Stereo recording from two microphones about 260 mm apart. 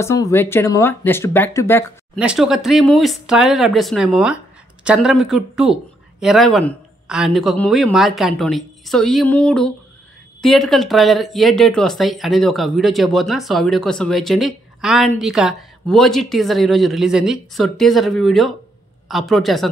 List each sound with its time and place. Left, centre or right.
0.0 s speech: centre
2.1 s speech: centre